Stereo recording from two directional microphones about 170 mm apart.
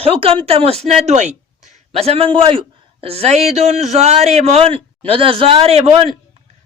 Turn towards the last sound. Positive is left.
turn(degrees=-40)  # may be behind; listen again after turning